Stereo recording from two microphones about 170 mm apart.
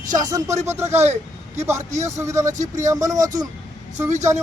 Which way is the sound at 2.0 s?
15° right (ahead or behind).